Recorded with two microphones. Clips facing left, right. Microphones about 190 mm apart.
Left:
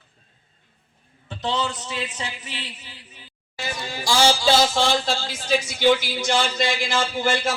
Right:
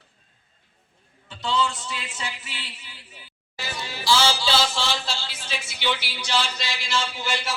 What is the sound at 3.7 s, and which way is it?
Speech, 45° left (ahead or behind).